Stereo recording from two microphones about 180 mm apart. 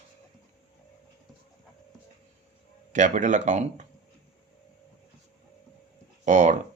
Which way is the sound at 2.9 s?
45° right (ahead or behind).